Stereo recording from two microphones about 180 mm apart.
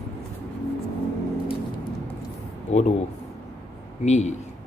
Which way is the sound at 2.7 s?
40° left (ahead or behind).